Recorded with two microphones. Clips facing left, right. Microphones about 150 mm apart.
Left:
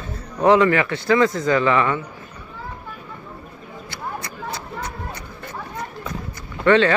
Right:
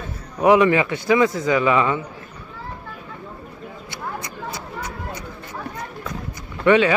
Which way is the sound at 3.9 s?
15° right (ahead or behind).